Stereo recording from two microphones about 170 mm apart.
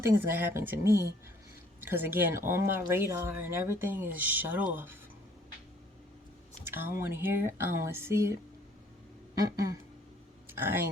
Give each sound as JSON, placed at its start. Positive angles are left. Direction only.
{"t": 0.0, "sound": "speech", "side_deg": -15}
{"t": 6.7, "sound": "speech", "side_deg": -15}
{"t": 9.4, "sound": "speech", "side_deg": -20}